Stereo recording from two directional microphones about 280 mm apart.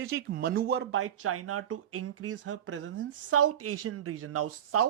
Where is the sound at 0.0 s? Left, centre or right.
Right.